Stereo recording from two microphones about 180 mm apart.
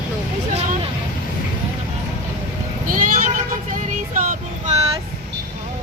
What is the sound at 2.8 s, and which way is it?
Child singing, 50° right (ahead or behind).